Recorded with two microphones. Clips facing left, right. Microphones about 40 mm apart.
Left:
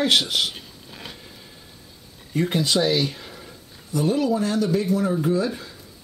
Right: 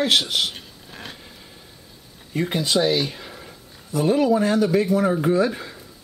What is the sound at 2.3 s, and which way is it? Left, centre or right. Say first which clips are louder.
Speech: even; centre.